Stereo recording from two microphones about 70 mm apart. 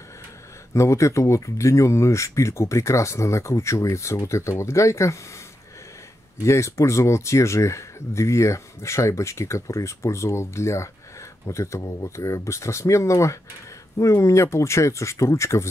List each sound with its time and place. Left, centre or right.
0.7 s speech: left
6.4 s speech: left